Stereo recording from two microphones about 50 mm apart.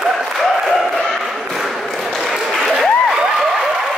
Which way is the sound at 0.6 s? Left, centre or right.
Centre.